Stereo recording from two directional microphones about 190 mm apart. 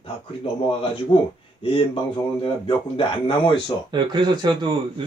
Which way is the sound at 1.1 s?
10° left (ahead or behind).